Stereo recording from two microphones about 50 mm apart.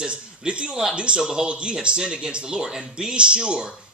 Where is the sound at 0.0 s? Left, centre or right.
Centre.